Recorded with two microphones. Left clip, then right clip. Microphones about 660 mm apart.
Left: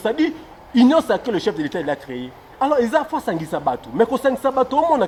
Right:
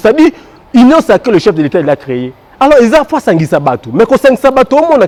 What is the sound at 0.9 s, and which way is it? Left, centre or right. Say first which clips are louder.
A man's voice: right 11 dB; right.